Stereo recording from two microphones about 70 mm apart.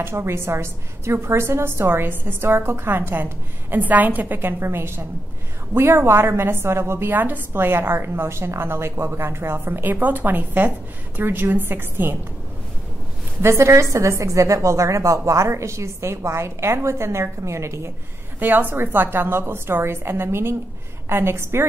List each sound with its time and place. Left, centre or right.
0.0 s a woman's voice: right
7.1 s a woman's voice: right
13.4 s a woman's voice: right
18.4 s a woman's voice: right